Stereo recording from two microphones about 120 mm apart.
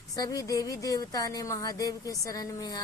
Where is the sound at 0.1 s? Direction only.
30° left (ahead or behind).